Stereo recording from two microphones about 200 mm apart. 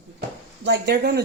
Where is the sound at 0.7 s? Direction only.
55° right (ahead or behind).